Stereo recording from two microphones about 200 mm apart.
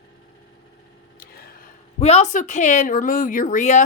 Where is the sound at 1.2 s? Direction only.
50° left (ahead or behind).